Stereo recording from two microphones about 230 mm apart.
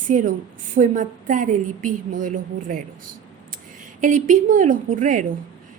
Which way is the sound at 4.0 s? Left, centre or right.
Right.